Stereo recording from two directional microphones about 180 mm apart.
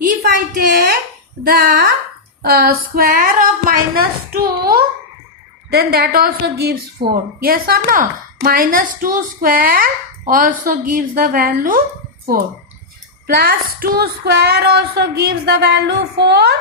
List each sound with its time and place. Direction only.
0.0 s a sound: 50° right (ahead or behind)
1.5 s a woman's voice: 55° right (ahead or behind)
13.2 s speech: 55° right (ahead or behind)